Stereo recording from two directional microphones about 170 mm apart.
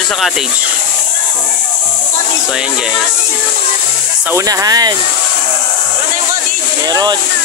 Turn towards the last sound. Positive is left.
turn(degrees=-25)  # may be behind; listen again after turning